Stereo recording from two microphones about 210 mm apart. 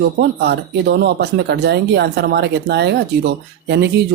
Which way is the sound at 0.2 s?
50° right (ahead or behind).